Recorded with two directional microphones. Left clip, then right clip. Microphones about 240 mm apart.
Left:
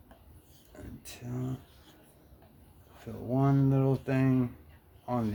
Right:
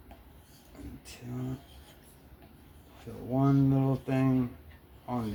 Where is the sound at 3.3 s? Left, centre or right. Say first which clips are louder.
Right 1 dB; left.